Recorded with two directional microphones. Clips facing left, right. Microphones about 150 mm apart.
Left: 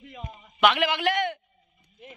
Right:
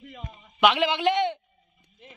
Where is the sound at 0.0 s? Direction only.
5° left (ahead or behind).